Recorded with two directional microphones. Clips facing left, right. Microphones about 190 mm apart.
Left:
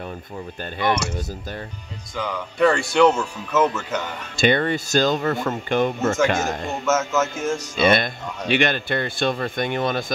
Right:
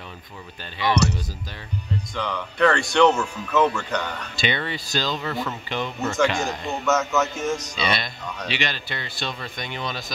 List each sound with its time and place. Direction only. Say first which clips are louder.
2.1 s speech: left 3 dB; 5° left (ahead or behind)
4.4 s speech: left 8 dB; 50° left (ahead or behind)
6.8 s speech: left 1 dB; centre (ahead or behind)
7.7 s speech: left 8 dB; 50° left (ahead or behind)